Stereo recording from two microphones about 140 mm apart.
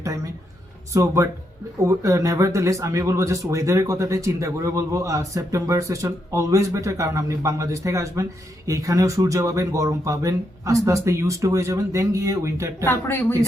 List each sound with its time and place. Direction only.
0.9 s speech: 20° right (ahead or behind)
12.8 s speech: 15° left (ahead or behind)